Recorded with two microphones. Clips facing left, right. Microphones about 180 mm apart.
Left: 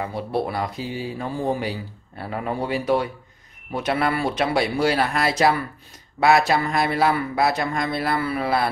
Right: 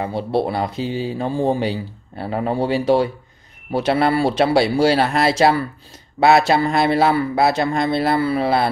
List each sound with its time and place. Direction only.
0.0 s speech: 30° right (ahead or behind)